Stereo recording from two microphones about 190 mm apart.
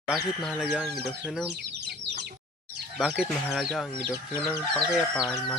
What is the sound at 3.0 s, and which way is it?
Speech, 5° right (ahead or behind).